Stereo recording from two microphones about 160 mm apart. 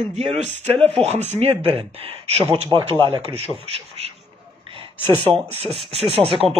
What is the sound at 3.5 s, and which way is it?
Speech, 40° right (ahead or behind).